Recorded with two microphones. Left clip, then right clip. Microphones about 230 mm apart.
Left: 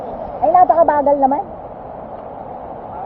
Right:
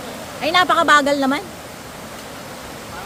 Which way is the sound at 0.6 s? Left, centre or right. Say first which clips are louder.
Left 1 dB; right.